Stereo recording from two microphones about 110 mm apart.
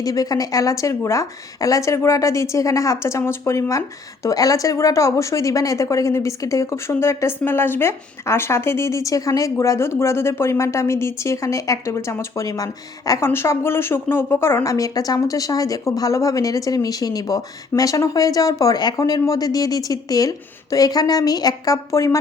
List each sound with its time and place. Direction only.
0.0 s speech: 35° left (ahead or behind)
13.2 s a woman's voice: 20° left (ahead or behind)